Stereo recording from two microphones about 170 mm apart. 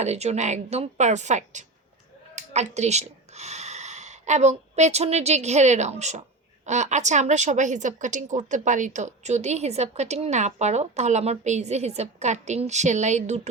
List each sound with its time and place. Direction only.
0.0 s a woman's voice: 40° right (ahead or behind)